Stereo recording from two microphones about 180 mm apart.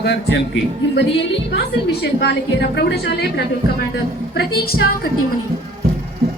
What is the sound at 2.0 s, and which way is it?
A woman's voice, 70° left (ahead or behind).